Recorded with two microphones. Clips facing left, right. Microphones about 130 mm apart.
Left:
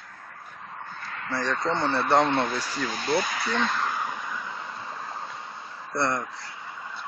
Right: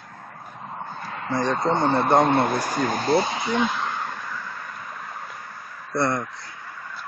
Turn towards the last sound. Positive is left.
turn(degrees=20)  # may be behind; listen again after turning